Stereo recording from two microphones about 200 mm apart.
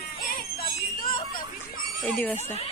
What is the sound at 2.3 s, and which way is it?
Speech, 35° left (ahead or behind).